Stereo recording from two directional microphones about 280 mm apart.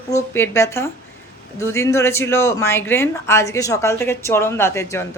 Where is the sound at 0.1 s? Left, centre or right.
Centre.